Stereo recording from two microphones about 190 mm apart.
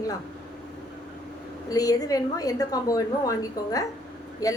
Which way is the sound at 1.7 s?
20° left (ahead or behind).